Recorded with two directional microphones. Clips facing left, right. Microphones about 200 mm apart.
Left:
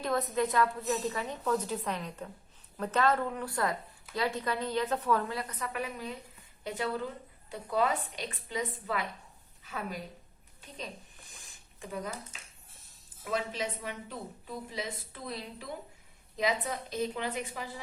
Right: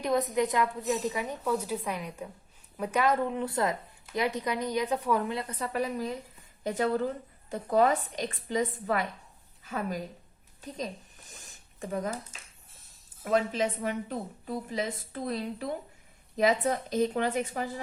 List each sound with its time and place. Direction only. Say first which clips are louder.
0.0 s a woman's voice: right 3 dB; 15° right (ahead or behind); by 10.0 s 45° right (ahead or behind)
11.3 s a sound: right 4 dB; 40° right (ahead or behind)
13.2 s a woman's voice: right 7 dB; 50° right (ahead or behind)